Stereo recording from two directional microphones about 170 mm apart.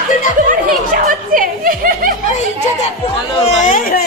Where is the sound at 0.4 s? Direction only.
55° right (ahead or behind).